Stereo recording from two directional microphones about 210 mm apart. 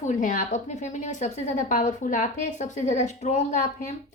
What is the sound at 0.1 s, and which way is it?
A woman's voice, 40° left (ahead or behind).